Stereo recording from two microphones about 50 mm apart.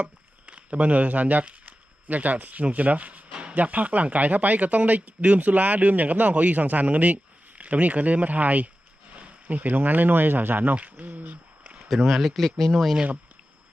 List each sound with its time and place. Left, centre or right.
0.0 s speech: right
10.8 s speech: right
11.6 s a sound: right
11.9 s speech: centre